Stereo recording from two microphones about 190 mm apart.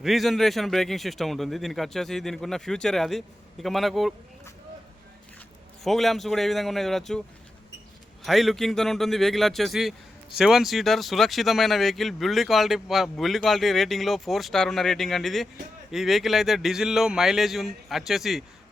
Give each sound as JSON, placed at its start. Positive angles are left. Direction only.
{"t": 0.0, "sound": "speech", "side_deg": 0}
{"t": 5.8, "sound": "speech", "side_deg": 0}
{"t": 8.2, "sound": "speech", "side_deg": 0}